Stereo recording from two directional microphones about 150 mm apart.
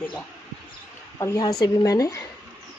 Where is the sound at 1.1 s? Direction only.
25° left (ahead or behind).